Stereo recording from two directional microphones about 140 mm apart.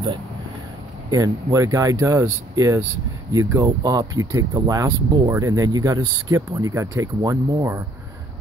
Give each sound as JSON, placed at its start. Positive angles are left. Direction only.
{"t": 1.1, "sound": "speech", "side_deg": -25}